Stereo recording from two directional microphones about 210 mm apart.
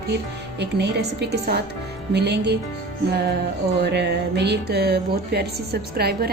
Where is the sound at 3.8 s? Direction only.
55° right (ahead or behind).